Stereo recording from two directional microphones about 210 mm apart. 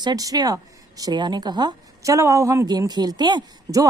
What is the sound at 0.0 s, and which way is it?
A woman's voice, 20° right (ahead or behind).